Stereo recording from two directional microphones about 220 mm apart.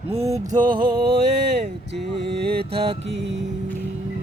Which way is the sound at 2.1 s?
50° right (ahead or behind).